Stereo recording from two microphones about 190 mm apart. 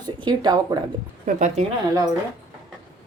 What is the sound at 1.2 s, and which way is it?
Speech, 40° right (ahead or behind).